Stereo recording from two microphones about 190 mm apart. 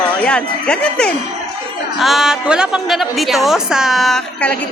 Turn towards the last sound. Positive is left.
turn(degrees=5)  # may be behind; listen again after turning